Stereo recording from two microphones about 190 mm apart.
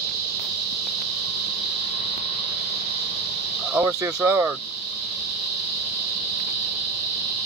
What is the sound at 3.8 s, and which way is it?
Speech, 10° right (ahead or behind).